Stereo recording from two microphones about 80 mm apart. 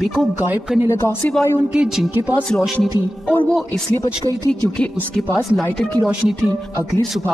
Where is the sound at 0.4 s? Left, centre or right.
Right.